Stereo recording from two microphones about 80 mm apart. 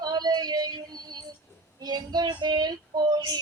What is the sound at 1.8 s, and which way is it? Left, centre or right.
Child singing, right.